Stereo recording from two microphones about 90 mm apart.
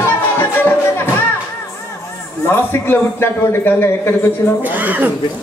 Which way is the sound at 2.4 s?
25° left (ahead or behind).